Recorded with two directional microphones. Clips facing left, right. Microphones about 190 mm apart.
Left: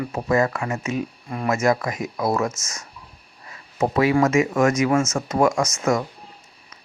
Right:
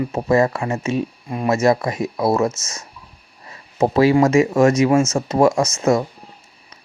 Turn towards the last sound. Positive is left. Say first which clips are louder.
# right 4 dB
turn(degrees=-25)  # may be behind; listen again after turning